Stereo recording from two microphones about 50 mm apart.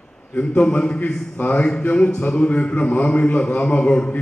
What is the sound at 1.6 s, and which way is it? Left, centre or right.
A man's voice, centre.